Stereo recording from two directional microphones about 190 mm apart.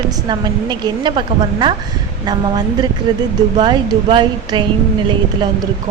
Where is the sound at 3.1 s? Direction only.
25° right (ahead or behind).